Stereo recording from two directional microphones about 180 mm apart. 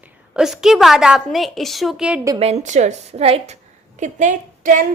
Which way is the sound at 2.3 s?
35° right (ahead or behind).